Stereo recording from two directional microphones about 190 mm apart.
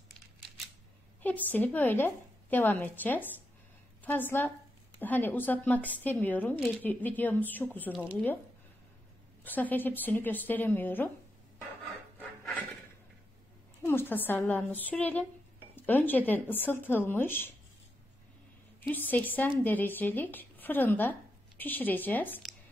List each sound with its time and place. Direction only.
1.2 s a woman's voice: 10° left (ahead or behind)
9.4 s a woman's voice: 10° left (ahead or behind)
12.2 s filing: 10° left (ahead or behind)
13.8 s a woman's voice: 10° left (ahead or behind)
18.8 s a woman's voice: 10° left (ahead or behind)